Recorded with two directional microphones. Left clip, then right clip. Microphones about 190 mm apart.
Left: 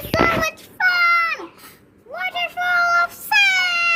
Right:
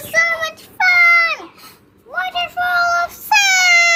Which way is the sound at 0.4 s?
30° right (ahead or behind).